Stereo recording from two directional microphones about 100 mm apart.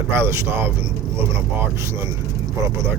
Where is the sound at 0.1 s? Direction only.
25° right (ahead or behind).